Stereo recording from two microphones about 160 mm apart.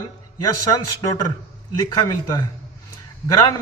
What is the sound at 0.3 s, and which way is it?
A man's voice, 25° left (ahead or behind).